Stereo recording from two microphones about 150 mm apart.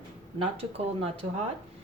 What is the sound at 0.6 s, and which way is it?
Speech, 40° right (ahead or behind).